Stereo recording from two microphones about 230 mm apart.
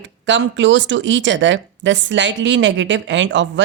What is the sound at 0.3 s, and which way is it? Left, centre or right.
Speech, right.